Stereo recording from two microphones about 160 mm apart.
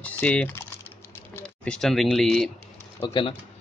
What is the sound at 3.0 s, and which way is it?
Speech, 30° left (ahead or behind).